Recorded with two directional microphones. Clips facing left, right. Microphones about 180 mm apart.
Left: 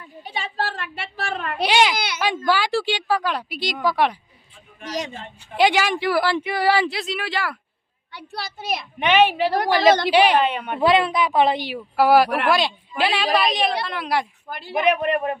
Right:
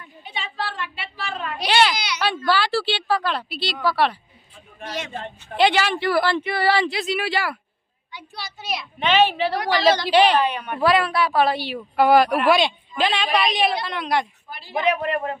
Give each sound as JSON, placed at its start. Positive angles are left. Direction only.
{"t": 0.2, "sound": "a sound", "side_deg": 40}
{"t": 1.6, "sound": "a child's voice", "side_deg": 15}
{"t": 5.5, "sound": "a woman's voice", "side_deg": 10}
{"t": 8.1, "sound": "a child's voice", "side_deg": 65}
{"t": 9.0, "sound": "a woman's voice", "side_deg": 15}
{"t": 9.6, "sound": "a woman's voice", "side_deg": 45}
{"t": 10.1, "sound": "a woman's voice", "side_deg": 10}
{"t": 10.4, "sound": "a woman's voice", "side_deg": 25}
{"t": 14.8, "sound": "a woman's voice", "side_deg": 20}